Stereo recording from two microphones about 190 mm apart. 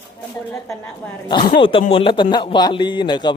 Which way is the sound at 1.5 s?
25° left (ahead or behind).